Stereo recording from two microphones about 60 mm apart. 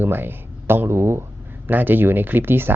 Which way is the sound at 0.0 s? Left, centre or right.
Right.